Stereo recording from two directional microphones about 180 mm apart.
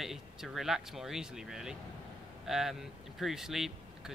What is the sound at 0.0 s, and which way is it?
Speech, centre (ahead or behind).